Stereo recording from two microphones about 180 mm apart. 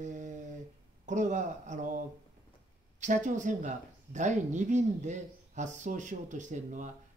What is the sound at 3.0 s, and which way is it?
Speech, 45° right (ahead or behind).